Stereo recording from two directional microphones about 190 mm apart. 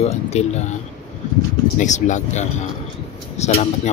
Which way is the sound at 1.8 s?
40° left (ahead or behind).